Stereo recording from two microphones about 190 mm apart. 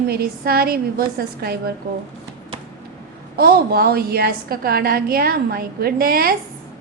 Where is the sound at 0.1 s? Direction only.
55° right (ahead or behind).